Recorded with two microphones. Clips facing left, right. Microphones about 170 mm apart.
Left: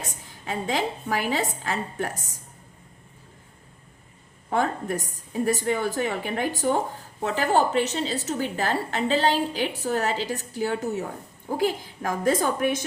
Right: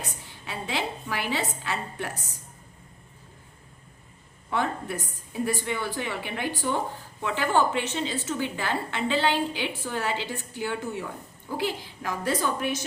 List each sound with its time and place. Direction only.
0.0 s a woman's voice: 45° left (ahead or behind)
4.4 s a woman's voice: 45° left (ahead or behind)